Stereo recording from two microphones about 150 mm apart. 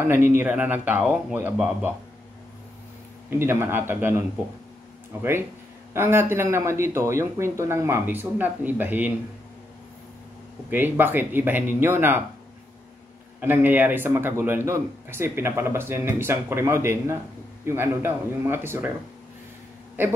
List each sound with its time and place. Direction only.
0.0 s speech: 15° right (ahead or behind)
3.3 s speech: 15° right (ahead or behind)
5.9 s speech: 15° right (ahead or behind)
10.7 s speech: 15° right (ahead or behind)
13.4 s speech: 15° right (ahead or behind)